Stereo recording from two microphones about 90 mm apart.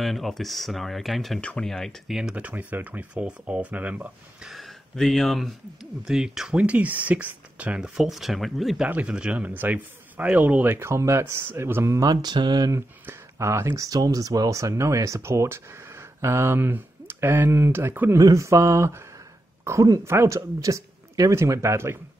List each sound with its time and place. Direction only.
0.0 s speech: centre (ahead or behind); by 4.5 s 15° right (ahead or behind)
4.5 s speech: centre (ahead or behind)
8.8 s a man's voice: 15° right (ahead or behind); by 12.0 s 30° right (ahead or behind)
12.0 s speech: 45° right (ahead or behind)
13.0 s speech: 30° right (ahead or behind)
18.1 s speech: 35° right (ahead or behind)